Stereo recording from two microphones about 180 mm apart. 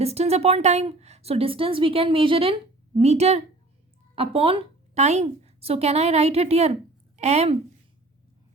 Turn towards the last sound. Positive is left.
turn(degrees=-35)  # may be behind; listen again after turning